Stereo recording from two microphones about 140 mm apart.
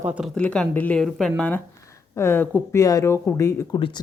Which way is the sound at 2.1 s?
20° left (ahead or behind).